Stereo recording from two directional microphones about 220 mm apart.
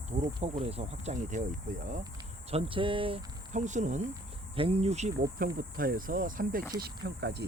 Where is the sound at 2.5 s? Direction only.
25° right (ahead or behind); by 6.6 s 40° right (ahead or behind).